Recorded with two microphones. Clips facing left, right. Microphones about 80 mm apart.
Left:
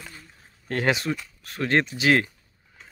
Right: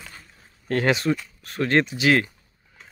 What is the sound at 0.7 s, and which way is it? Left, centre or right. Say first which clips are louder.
Speech: right 3 dB; centre.